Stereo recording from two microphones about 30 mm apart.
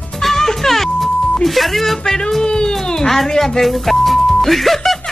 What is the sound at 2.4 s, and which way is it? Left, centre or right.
Speech, left.